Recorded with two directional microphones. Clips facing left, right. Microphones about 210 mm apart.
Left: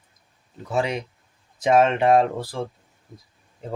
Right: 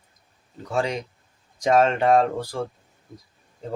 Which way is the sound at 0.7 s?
10° left (ahead or behind).